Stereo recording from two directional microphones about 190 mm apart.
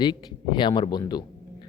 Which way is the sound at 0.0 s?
25° left (ahead or behind).